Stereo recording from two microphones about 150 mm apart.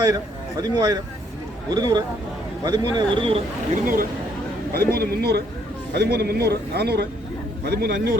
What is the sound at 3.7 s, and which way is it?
Speech, 70° right (ahead or behind).